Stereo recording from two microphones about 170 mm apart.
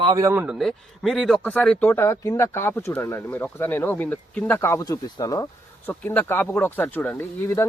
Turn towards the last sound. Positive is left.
turn(degrees=15)  # may be behind; listen again after turning